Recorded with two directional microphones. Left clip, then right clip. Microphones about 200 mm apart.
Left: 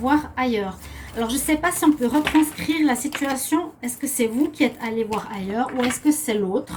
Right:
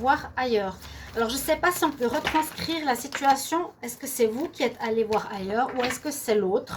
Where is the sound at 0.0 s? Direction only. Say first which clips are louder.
Left 3 dB; 50° right (ahead or behind).